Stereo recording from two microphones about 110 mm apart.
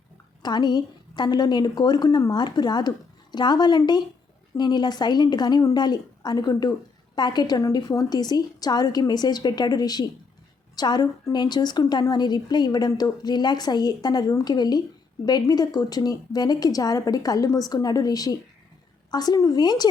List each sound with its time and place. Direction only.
0.4 s a woman's voice: 40° left (ahead or behind)